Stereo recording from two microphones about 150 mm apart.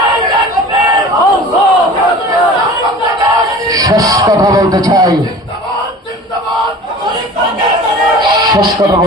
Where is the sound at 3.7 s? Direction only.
25° right (ahead or behind).